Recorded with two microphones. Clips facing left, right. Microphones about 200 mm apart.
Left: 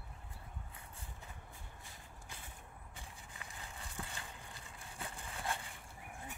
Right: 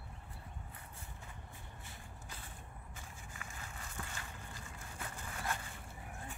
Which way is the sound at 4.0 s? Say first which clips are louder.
Left 1 dB; 20° left (ahead or behind).